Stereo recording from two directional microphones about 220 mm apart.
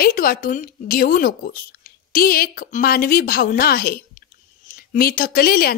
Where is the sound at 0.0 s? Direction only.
40° left (ahead or behind).